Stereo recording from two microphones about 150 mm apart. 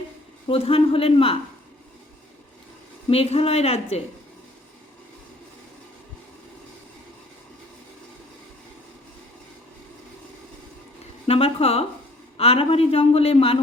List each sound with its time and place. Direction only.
0.4 s a man's voice: 40° left (ahead or behind)
3.1 s speech: 40° left (ahead or behind)
11.0 s a sound: 40° left (ahead or behind)
12.4 s a man's voice: 40° left (ahead or behind)